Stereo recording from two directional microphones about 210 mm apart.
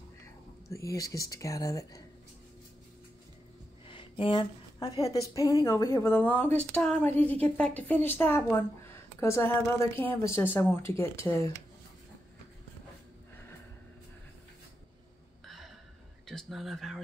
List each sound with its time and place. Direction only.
0.7 s a woman's voice: 15° left (ahead or behind)
3.8 s a woman's voice: 25° left (ahead or behind)
15.4 s a sound: centre (ahead or behind)
16.3 s speech: centre (ahead or behind)